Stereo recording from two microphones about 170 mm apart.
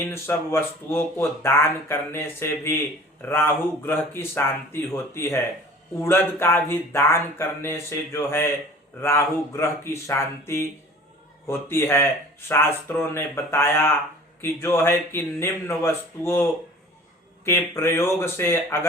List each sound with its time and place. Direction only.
0.1 s speech: 15° left (ahead or behind)